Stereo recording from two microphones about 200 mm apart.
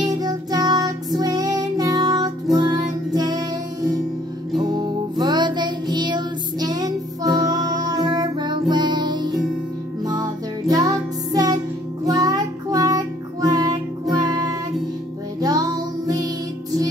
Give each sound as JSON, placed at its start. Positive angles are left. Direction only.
{"t": 0.2, "sound": "music", "side_deg": -20}
{"t": 12.1, "sound": "child singing", "side_deg": -20}
{"t": 15.4, "sound": "music", "side_deg": -20}